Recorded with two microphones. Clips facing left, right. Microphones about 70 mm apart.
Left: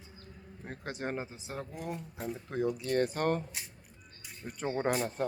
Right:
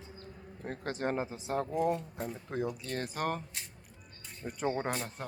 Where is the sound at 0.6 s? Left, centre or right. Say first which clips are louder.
Right 3 dB; centre.